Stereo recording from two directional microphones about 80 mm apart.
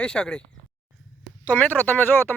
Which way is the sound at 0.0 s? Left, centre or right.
Centre.